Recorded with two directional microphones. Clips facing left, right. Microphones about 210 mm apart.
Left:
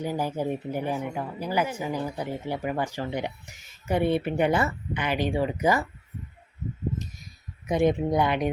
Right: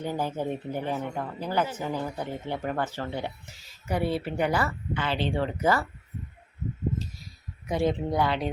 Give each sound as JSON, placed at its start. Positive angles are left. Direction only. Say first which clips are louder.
{"t": 0.0, "sound": "speech", "louder": "left 2 dB", "side_deg": 10}
{"t": 7.7, "sound": "speech", "louder": "left 3 dB", "side_deg": 20}